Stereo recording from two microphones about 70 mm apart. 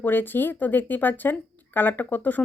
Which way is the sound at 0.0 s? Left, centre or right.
Left.